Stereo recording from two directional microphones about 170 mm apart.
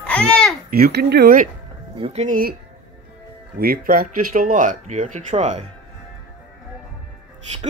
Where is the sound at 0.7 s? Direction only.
70° right (ahead or behind).